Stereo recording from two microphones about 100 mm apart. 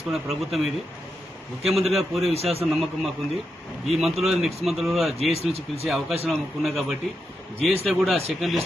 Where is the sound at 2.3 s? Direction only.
90° right.